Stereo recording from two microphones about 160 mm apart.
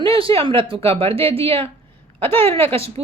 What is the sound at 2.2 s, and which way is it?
Speech, 15° left (ahead or behind).